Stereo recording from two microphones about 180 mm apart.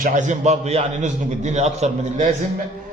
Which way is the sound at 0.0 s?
45° right (ahead or behind).